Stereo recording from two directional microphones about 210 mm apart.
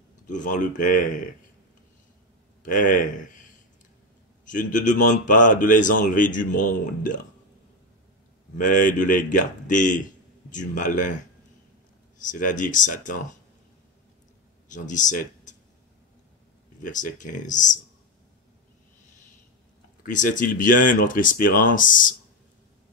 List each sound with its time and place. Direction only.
0.3 s speech: 35° left (ahead or behind)
2.6 s speech: 40° left (ahead or behind)
4.5 s speech: 40° left (ahead or behind)
8.5 s speech: 40° left (ahead or behind)
12.3 s speech: 40° left (ahead or behind)
14.7 s speech: 35° left (ahead or behind)
16.8 s speech: 35° left (ahead or behind)
20.1 s speech: 40° left (ahead or behind)